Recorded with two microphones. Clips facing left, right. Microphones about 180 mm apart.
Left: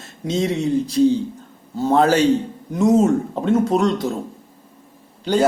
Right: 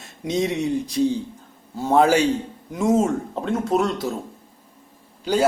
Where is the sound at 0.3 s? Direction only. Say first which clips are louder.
Left 2 dB; 15° right (ahead or behind).